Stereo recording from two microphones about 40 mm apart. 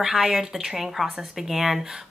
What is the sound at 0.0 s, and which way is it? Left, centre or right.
A woman's voice, centre.